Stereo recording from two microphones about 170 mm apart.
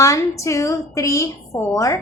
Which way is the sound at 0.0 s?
20° left (ahead or behind).